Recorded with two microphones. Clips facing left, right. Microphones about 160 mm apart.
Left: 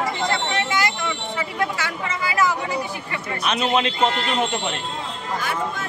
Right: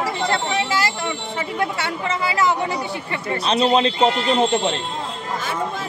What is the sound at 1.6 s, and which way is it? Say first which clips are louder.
Speech: right 2 dB; 30° right (ahead or behind).